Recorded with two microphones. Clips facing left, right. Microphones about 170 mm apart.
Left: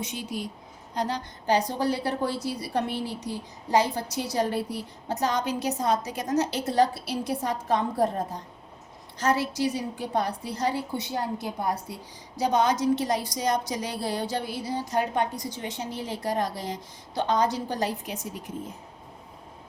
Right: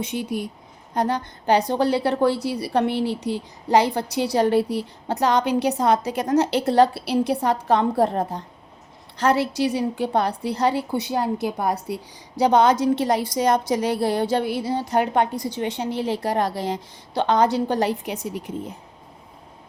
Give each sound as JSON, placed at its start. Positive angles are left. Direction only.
{"t": 0.0, "sound": "a woman's voice", "side_deg": -60}
{"t": 12.4, "sound": "speech", "side_deg": -65}